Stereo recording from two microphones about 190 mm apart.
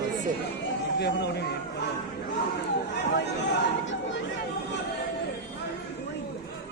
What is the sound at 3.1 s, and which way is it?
Speech, 65° left (ahead or behind).